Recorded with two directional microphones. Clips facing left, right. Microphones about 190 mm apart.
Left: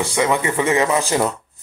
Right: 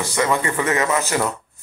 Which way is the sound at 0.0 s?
20° left (ahead or behind).